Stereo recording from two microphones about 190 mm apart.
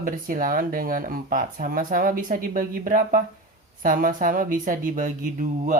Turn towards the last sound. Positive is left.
turn(degrees=-45)  # may be behind; listen again after turning